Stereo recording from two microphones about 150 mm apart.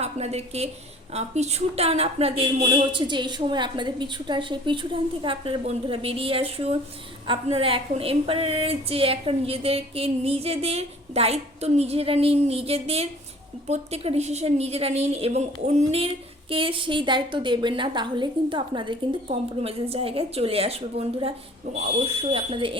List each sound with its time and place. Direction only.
0.0 s a woman's voice: 45° right (ahead or behind)